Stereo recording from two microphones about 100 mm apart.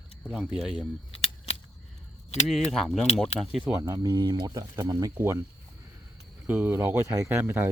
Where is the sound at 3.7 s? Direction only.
35° right (ahead or behind).